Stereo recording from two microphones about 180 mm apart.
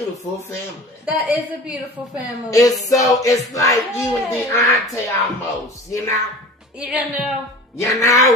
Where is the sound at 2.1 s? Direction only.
20° left (ahead or behind).